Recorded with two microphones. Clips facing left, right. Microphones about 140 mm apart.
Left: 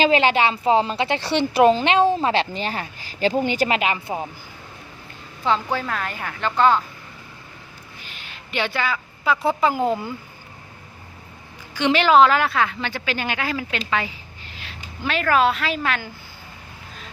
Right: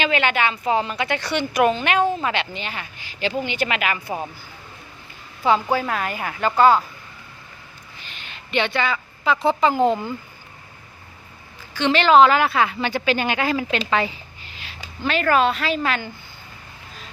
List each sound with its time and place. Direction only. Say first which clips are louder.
0.0 s a woman's voice: left 4 dB; 30° left (ahead or behind)
5.7 s a woman's voice: right 3 dB; 10° right (ahead or behind)
8.2 s a woman's voice: right 3 dB; 5° left (ahead or behind)
11.7 s a woman's voice: right 1 dB; 10° left (ahead or behind); by 13.7 s 25° right (ahead or behind)
14.5 s a sound: left 2 dB; centre (ahead or behind)
15.0 s a woman's voice: even; centre (ahead or behind)